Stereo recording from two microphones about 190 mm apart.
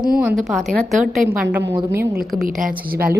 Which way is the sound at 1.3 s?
10° right (ahead or behind).